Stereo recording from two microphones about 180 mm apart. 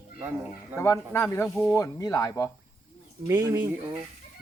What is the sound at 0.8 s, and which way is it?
Speech, 15° left (ahead or behind).